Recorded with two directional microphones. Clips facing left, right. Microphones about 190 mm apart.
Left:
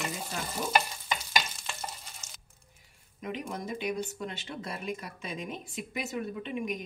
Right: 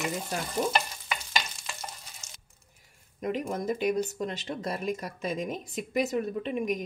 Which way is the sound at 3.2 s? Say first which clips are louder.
Right 6 dB; 45° right (ahead or behind).